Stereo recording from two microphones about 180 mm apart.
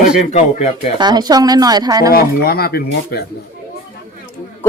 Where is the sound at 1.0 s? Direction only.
25° right (ahead or behind).